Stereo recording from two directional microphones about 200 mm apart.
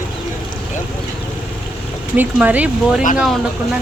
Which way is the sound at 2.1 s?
10° right (ahead or behind).